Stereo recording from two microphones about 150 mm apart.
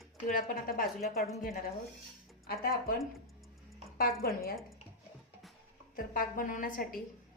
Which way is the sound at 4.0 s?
85° left.